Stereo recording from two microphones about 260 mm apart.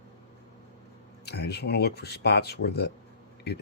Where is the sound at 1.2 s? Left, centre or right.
Left.